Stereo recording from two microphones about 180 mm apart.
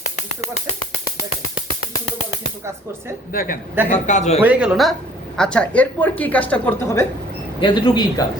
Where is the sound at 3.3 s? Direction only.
50° left (ahead or behind).